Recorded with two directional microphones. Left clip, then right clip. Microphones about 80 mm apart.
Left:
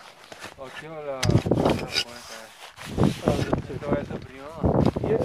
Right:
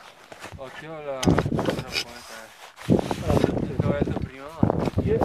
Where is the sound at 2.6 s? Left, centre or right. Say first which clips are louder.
Right 3 dB; centre.